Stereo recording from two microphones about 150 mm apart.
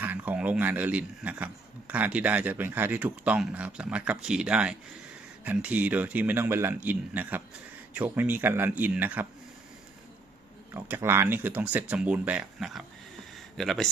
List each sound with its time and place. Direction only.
0.0 s a man's voice: 10° right (ahead or behind)
10.8 s speech: 15° right (ahead or behind)
13.3 s a sound: centre (ahead or behind)